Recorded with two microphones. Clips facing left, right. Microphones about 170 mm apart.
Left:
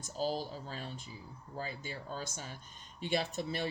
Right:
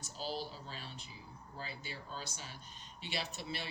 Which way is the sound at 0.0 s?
45° left (ahead or behind).